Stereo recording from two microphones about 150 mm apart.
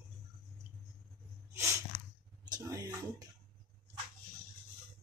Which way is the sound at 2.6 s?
20° right (ahead or behind).